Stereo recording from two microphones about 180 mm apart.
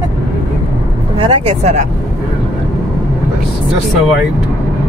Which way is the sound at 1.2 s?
30° right (ahead or behind).